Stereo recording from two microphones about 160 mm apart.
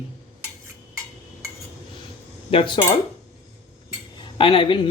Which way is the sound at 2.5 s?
35° left (ahead or behind).